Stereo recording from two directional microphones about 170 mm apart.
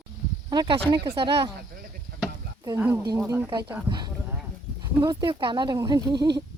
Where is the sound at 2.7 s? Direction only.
10° right (ahead or behind).